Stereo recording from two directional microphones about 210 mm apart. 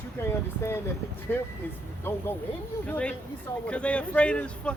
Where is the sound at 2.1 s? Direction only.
10° left (ahead or behind).